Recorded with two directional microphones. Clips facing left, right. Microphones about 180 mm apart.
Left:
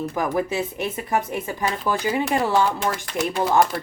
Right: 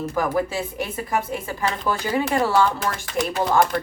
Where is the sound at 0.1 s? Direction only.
15° left (ahead or behind).